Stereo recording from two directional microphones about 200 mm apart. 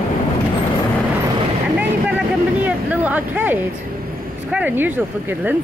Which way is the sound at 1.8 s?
5° right (ahead or behind).